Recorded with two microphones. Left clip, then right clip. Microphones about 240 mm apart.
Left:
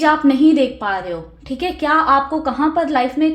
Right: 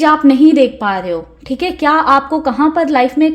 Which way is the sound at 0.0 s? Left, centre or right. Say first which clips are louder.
Right 4 dB; right.